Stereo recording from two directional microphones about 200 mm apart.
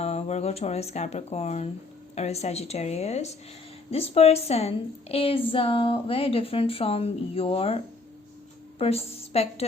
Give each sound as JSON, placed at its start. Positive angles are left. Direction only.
{"t": 0.0, "sound": "a woman's voice", "side_deg": 30}
{"t": 8.8, "sound": "a woman's voice", "side_deg": 30}